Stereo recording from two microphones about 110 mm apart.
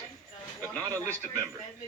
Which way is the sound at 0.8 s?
30° right (ahead or behind).